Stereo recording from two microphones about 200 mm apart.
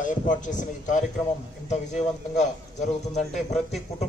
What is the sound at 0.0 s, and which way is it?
A man's voice, 40° left (ahead or behind).